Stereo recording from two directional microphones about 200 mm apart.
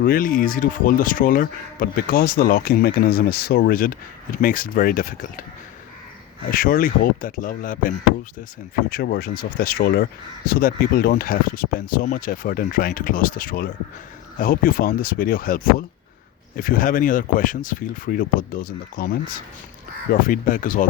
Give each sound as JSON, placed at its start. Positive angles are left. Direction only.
{"t": 0.0, "sound": "speech", "side_deg": 45}
{"t": 6.5, "sound": "speech", "side_deg": 45}
{"t": 20.2, "sound": "speech", "side_deg": 45}